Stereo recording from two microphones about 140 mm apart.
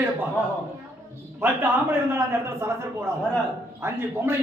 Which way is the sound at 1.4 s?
15° right (ahead or behind).